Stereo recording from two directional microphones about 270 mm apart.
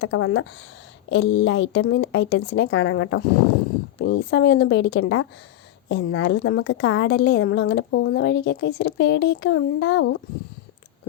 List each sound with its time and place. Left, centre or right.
0.0 s a woman's voice: left